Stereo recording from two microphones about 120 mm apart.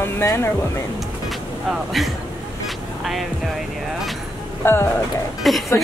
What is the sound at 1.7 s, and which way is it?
Speech, centre (ahead or behind).